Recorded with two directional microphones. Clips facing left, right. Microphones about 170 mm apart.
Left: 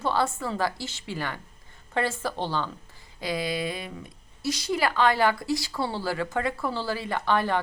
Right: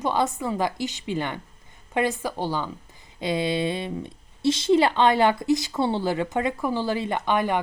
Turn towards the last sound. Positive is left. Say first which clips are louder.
# right 2 dB
turn(degrees=-15)  # may be behind; listen again after turning